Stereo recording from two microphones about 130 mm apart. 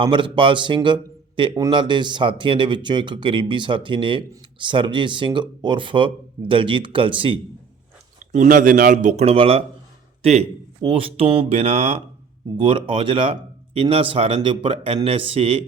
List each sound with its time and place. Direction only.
0.0 s speech: 40° right (ahead or behind)
8.3 s speech: 80° right; by 12.0 s 55° right (ahead or behind)
12.5 s speech: 45° right (ahead or behind)